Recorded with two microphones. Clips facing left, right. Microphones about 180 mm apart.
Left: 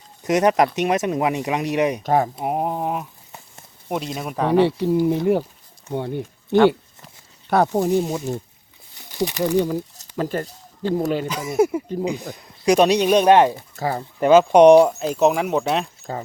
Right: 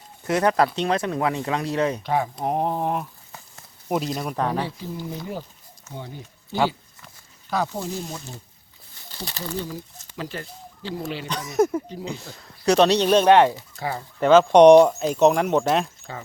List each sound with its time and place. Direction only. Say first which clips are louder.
0.2 s speech: left 3 dB; 20° left (ahead or behind)
2.0 s speech: left 5 dB; 45° left (ahead or behind)
2.3 s speech: left 1 dB; 5° left (ahead or behind)
4.4 s speech: left 10 dB; 70° left (ahead or behind)
9.0 s crumpling: left 13 dB; 15° left (ahead or behind)
10.0 s speech: left 9 dB; 45° left (ahead or behind)
11.3 s speech: right 3 dB; 10° left (ahead or behind)
13.6 s speech: left 5 dB; 45° left (ahead or behind)
14.2 s speech: left 1 dB; 10° left (ahead or behind)
16.1 s speech: left 7 dB; 40° left (ahead or behind)